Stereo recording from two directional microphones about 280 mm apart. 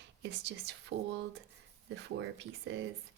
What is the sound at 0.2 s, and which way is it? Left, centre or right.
Speech, right.